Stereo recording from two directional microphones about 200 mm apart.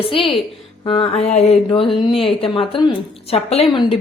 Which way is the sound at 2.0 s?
25° left (ahead or behind).